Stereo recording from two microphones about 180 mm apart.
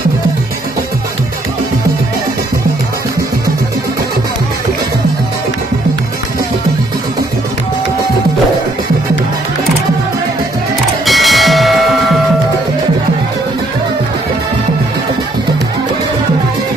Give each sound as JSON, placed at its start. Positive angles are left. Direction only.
{"t": 11.1, "sound": "bell", "side_deg": 0}